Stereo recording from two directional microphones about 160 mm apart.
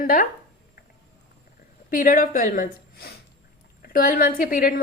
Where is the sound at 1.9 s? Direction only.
60° left (ahead or behind).